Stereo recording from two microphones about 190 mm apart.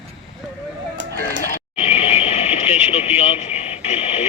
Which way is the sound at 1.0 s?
70° right (ahead or behind).